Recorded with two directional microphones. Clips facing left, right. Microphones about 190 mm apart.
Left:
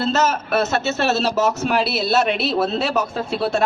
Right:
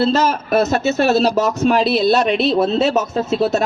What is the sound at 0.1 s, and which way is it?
Speech, 35° right (ahead or behind).